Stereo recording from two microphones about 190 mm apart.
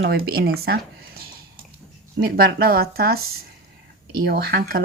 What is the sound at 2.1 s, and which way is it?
A woman's voice, 55° right (ahead or behind).